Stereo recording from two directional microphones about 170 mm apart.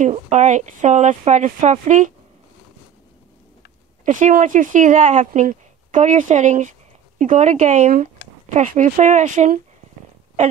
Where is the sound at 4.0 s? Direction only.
50° right (ahead or behind).